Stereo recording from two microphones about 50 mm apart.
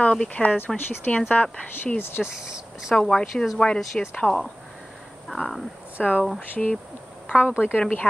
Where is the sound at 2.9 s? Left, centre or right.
Centre.